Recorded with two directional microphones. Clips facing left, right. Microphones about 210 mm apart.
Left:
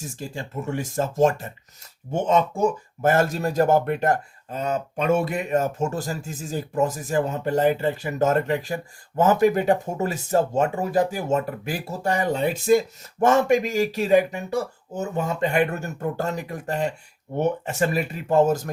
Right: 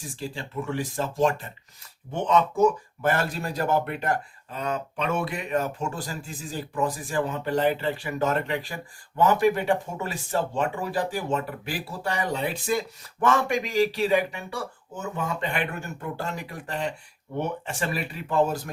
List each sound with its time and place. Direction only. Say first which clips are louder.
0.1 s speech: left 1 dB; 45° left (ahead or behind)